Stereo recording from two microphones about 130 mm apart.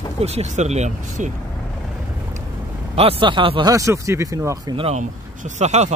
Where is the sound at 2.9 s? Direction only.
50° right (ahead or behind).